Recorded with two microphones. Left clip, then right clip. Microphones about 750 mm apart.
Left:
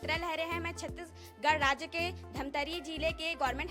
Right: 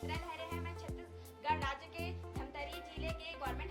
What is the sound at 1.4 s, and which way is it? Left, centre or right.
A woman's voice, left.